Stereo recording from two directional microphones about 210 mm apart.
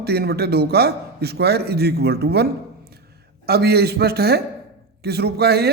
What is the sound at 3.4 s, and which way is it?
A man's voice, 50° right (ahead or behind).